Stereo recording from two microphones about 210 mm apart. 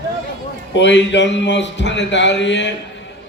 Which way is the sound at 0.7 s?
60° left (ahead or behind).